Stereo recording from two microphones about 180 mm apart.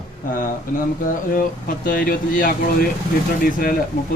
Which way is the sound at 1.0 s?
50° left (ahead or behind).